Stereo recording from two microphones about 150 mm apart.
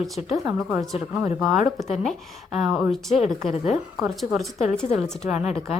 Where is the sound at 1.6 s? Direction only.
50° left (ahead or behind).